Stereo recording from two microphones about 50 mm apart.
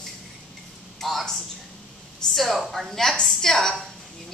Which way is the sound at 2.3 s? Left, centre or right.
Centre.